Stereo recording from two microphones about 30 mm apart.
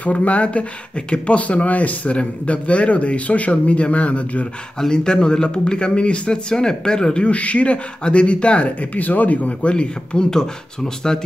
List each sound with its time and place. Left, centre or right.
0.0 s speech: left
1.7 s speech: left
2.4 s speech: left
4.9 s speech: left
6.5 s speech: left
7.2 s speech: left
8.9 s speech: left
9.7 s speech: left
10.3 s speech: left